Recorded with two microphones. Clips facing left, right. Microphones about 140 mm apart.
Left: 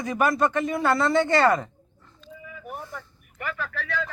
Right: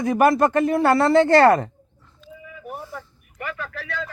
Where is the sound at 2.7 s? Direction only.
5° right (ahead or behind).